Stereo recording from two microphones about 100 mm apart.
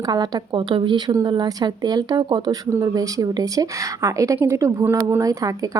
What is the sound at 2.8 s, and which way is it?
A woman's voice, 35° right (ahead or behind).